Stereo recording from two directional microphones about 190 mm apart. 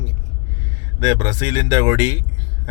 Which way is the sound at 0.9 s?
25° right (ahead or behind).